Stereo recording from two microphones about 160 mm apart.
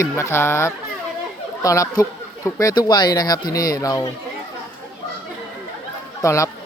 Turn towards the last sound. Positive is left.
turn(degrees=20)  # may be behind; listen again after turning